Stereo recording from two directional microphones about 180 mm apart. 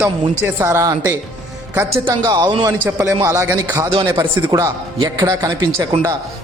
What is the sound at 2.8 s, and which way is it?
A man's voice, 10° right (ahead or behind).